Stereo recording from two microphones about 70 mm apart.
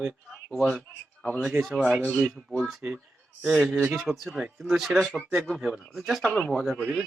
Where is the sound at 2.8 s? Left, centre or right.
Centre.